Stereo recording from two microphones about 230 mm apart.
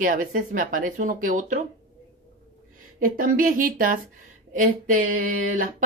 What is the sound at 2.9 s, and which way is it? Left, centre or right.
Speech, right.